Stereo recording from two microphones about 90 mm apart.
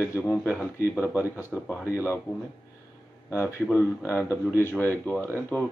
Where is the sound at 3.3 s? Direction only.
30° left (ahead or behind).